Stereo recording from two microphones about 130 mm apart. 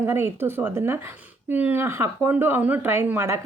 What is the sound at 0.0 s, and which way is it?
A woman's voice, 20° right (ahead or behind).